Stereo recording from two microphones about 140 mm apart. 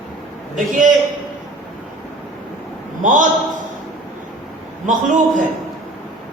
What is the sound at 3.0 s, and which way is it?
Speech, 65° right (ahead or behind).